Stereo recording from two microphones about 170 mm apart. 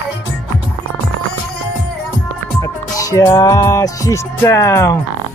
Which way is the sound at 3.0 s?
20° left (ahead or behind).